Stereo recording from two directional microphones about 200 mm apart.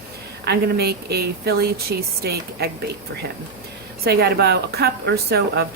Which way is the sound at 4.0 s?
55° right (ahead or behind).